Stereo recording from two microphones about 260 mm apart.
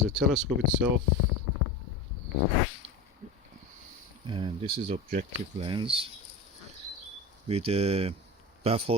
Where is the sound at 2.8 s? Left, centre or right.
Right.